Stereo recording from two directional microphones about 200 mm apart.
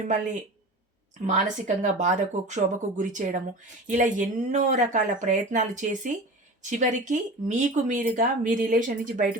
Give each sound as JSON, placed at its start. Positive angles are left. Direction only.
{"t": 1.2, "sound": "speech", "side_deg": -40}